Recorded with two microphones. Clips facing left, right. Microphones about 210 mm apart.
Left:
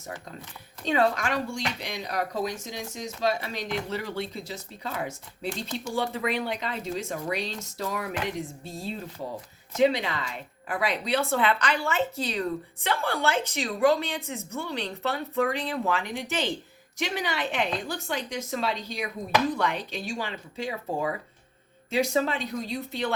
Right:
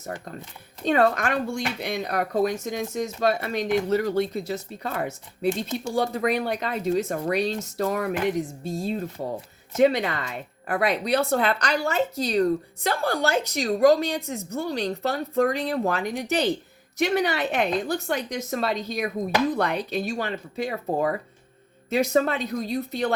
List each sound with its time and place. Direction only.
0.9 s speech: 55° right (ahead or behind)
5.5 s speech: 20° right (ahead or behind)
5.9 s speech: 40° right (ahead or behind)
17.0 s speech: 55° right (ahead or behind)